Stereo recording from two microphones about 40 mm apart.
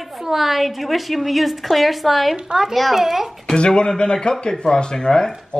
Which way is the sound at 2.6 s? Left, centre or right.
Centre.